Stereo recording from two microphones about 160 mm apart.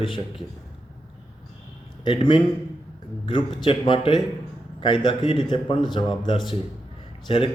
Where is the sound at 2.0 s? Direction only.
35° left (ahead or behind).